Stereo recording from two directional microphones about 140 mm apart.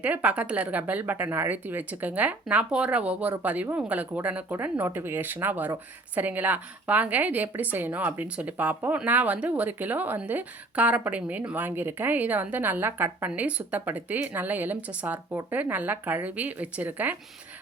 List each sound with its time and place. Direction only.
0.0 s a woman's voice: 10° right (ahead or behind)